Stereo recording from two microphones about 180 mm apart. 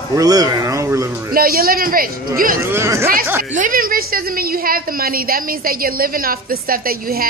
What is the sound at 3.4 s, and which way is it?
A woman's voice, 50° right (ahead or behind).